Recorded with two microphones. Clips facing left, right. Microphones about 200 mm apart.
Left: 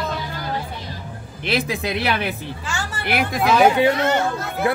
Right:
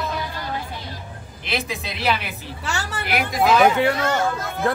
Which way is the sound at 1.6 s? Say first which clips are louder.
Left 6 dB; 55° left (ahead or behind).